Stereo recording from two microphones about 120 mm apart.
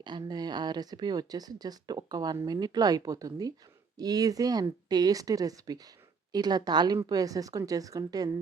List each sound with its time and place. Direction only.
0.0 s speech: 35° right (ahead or behind)